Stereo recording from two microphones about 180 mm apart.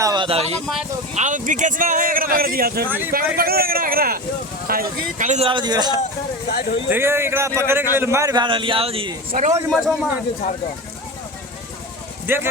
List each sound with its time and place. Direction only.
0.0 s speech: 25° right (ahead or behind)
1.1 s speech: 45° right (ahead or behind)
2.8 s a man's voice: 10° right (ahead or behind)
3.3 s speech: 55° right (ahead or behind)
5.5 s a man's voice: 25° right (ahead or behind)
6.5 s speech: 60° left (ahead or behind)
6.9 s a man's voice: 15° right (ahead or behind); by 9.1 s 30° right (ahead or behind)
9.3 s speech: 45° right (ahead or behind)
9.6 s a man's voice: centre (ahead or behind)
12.2 s speech: 10° right (ahead or behind)